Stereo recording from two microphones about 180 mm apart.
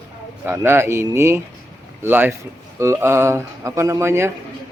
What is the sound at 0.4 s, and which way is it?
A man's voice, 15° right (ahead or behind).